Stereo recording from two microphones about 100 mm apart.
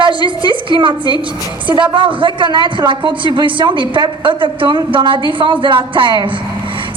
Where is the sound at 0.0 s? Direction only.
55° right (ahead or behind).